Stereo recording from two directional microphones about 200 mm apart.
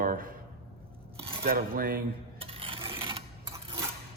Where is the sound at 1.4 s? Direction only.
45° right (ahead or behind).